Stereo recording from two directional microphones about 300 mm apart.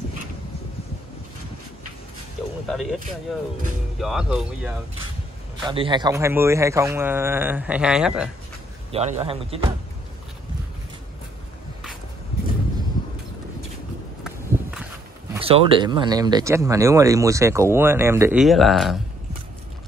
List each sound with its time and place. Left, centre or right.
2.7 s speech: centre
5.7 s speech: centre
8.9 s a man's voice: centre
14.2 s walk: centre
15.4 s speech: centre